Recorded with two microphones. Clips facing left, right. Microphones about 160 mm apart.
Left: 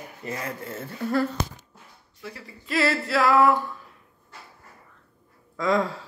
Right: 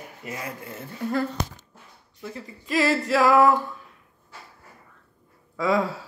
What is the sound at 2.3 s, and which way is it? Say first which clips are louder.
Speech: right 2 dB; 15° right (ahead or behind).